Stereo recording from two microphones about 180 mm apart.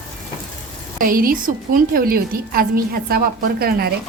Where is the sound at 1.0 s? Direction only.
50° right (ahead or behind).